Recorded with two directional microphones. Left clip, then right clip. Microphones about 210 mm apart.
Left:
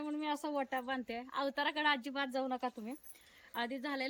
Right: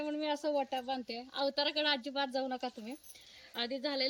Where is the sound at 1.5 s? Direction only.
10° left (ahead or behind).